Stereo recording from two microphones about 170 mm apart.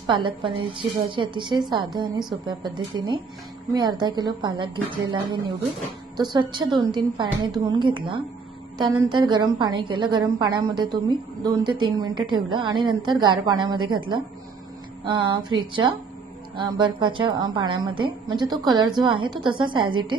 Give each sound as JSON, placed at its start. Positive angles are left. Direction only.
{"t": 0.0, "sound": "a woman's voice", "side_deg": -30}